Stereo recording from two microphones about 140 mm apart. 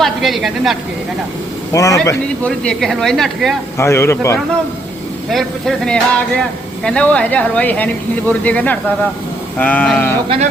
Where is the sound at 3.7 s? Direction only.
20° left (ahead or behind).